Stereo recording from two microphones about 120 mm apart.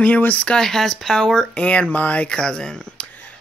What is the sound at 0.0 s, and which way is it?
Speech, 10° left (ahead or behind).